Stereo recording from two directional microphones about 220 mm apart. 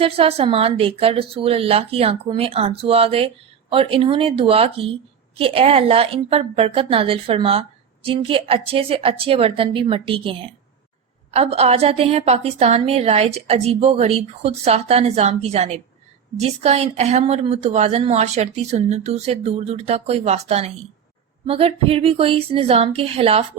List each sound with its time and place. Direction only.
0.0 s speech: 25° right (ahead or behind)